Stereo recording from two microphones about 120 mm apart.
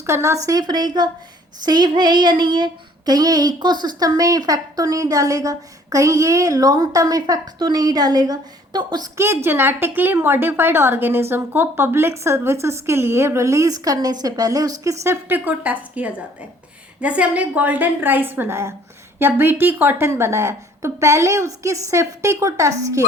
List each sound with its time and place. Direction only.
0.0 s a woman's voice: 25° right (ahead or behind)
0.4 s a woman's voice: 35° right (ahead or behind)
9.1 s a woman's voice: 20° right (ahead or behind)